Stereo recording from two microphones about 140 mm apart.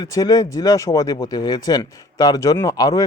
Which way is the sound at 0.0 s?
25° left (ahead or behind).